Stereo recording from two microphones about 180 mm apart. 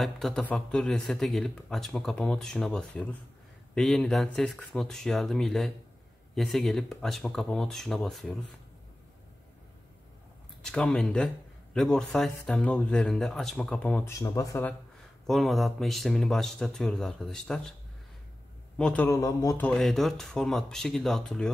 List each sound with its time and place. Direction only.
0.0 s speech: centre (ahead or behind)
10.6 s speech: 5° left (ahead or behind)
15.2 s speech: centre (ahead or behind)
18.8 s speech: 5° left (ahead or behind)
19.0 s speech: 20° left (ahead or behind)
19.6 s speech: 5° left (ahead or behind)